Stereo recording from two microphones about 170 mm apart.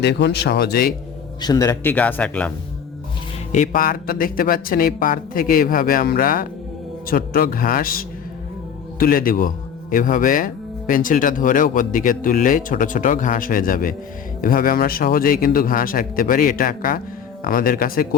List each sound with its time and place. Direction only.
0.0 s speech: 85° left; by 0.9 s 65° left (ahead or behind)
1.4 s a man's voice: 20° left (ahead or behind)
3.5 s speech: 50° left (ahead or behind)